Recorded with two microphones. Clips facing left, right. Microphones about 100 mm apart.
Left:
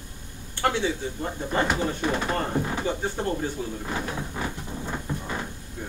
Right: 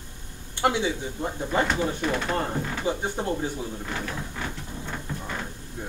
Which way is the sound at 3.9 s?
20° left (ahead or behind).